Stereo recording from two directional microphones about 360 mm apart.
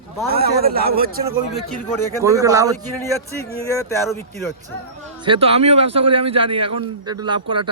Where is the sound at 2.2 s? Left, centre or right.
Centre.